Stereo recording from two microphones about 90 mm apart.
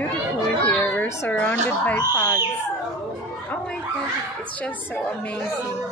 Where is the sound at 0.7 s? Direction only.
25° left (ahead or behind).